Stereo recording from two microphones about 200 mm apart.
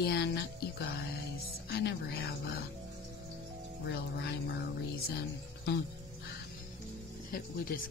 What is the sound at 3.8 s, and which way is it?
Speech, 55° left (ahead or behind).